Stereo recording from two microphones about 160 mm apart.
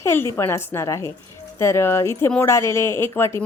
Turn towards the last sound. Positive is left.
turn(degrees=15)  # may be behind; listen again after turning